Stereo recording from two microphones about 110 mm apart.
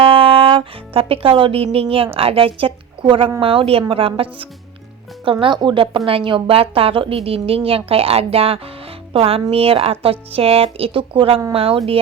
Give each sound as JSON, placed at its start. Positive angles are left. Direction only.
{"t": 0.0, "sound": "a woman's voice", "side_deg": -55}